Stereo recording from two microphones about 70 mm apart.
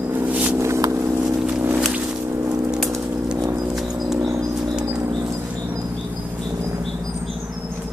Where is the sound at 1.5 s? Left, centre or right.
Right.